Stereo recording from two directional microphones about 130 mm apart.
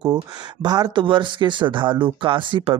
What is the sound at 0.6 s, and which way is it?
Speech, 30° right (ahead or behind).